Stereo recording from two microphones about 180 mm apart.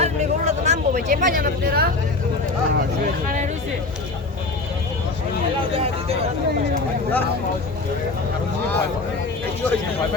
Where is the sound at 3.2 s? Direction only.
45° right (ahead or behind).